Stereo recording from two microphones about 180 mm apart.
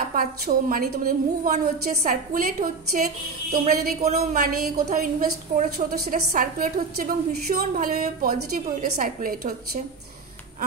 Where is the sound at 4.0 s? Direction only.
40° right (ahead or behind).